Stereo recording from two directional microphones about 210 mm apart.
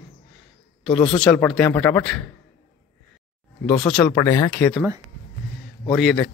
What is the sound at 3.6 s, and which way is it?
Speech, 5° left (ahead or behind).